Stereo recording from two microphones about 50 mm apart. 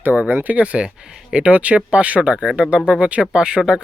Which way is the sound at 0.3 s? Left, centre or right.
Right.